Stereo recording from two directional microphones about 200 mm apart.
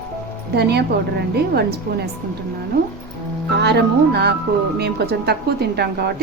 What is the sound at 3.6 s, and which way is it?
A woman's voice, 55° right (ahead or behind).